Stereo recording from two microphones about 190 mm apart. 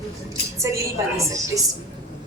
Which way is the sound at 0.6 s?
15° right (ahead or behind).